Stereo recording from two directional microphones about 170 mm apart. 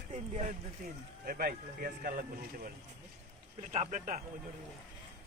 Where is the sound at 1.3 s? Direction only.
60° right (ahead or behind).